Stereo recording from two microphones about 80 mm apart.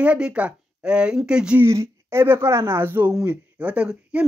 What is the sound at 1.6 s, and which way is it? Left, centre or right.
Speech, right.